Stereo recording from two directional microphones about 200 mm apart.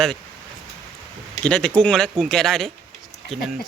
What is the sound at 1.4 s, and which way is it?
Speech, 5° left (ahead or behind).